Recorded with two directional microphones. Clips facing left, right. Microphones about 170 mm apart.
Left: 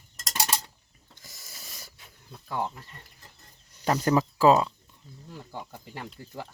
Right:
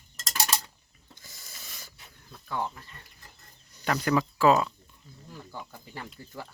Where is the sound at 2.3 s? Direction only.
20° left (ahead or behind).